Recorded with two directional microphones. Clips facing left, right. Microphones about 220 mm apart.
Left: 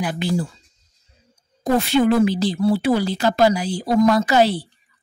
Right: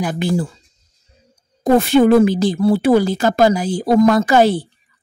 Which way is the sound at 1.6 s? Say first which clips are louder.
Right 5 dB; 50° right (ahead or behind).